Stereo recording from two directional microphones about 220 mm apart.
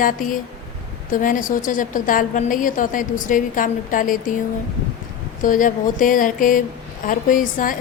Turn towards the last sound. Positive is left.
turn(degrees=35)  # may be behind; listen again after turning